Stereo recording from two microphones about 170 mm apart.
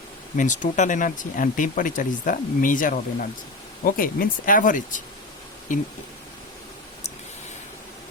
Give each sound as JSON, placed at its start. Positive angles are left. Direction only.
{"t": 0.3, "sound": "speech", "side_deg": 50}